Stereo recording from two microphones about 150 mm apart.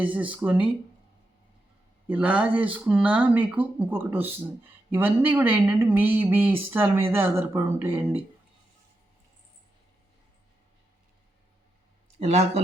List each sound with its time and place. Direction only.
0.0 s speech: 10° right (ahead or behind)
2.0 s speech: 10° right (ahead or behind)
12.2 s speech: 45° right (ahead or behind)